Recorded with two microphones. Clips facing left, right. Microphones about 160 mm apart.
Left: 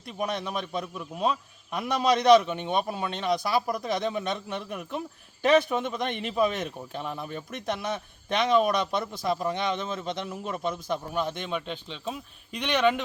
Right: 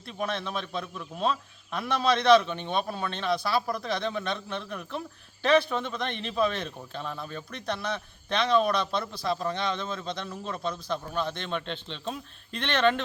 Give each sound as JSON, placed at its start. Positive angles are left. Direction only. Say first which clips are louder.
{"t": 0.0, "sound": "a man's voice", "louder": "left 1 dB", "side_deg": 15}